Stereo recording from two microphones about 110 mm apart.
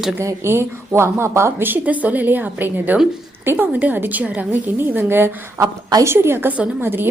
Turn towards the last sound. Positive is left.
turn(degrees=-20)  # may be behind; listen again after turning